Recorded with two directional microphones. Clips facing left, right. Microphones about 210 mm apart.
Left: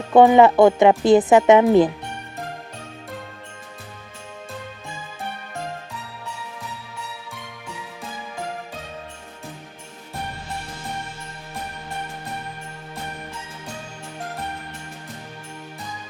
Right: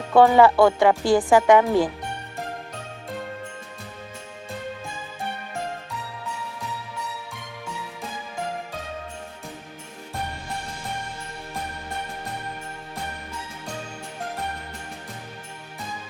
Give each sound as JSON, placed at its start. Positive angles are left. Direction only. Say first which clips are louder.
{"t": 0.1, "sound": "speech", "louder": "left 3 dB", "side_deg": 20}